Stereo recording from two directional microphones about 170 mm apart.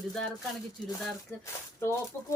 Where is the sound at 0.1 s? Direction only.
5° left (ahead or behind).